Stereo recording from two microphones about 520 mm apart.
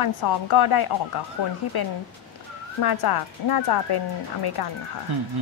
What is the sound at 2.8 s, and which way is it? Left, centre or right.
Speech, left.